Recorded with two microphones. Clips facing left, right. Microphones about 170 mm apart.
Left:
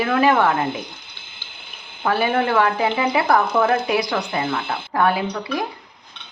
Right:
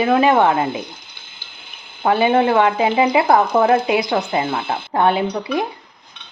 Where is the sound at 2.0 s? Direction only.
20° right (ahead or behind).